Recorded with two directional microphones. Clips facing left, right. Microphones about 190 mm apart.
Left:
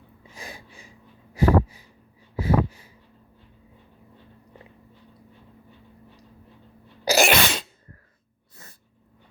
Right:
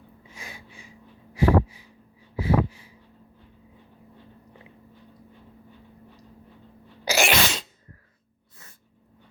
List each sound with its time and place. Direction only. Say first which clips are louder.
0.3 s a sound: left 3 dB; 35° left (ahead or behind)
2.4 s sniff: left 1 dB; 45° left (ahead or behind)
7.0 s sneeze: left 4 dB; 40° left (ahead or behind)
7.3 s sneeze: left 2 dB; 55° left (ahead or behind)